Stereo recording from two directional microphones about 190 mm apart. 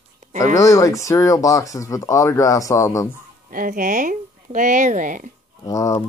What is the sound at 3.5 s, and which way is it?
Speech, 45° right (ahead or behind).